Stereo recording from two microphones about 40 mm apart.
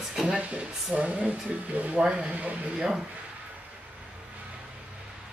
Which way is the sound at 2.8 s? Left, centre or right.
Centre.